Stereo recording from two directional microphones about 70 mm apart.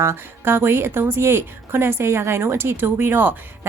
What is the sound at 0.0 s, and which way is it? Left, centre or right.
Speech, right.